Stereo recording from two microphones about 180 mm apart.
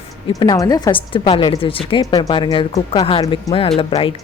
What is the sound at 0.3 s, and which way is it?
A woman's voice, 20° left (ahead or behind).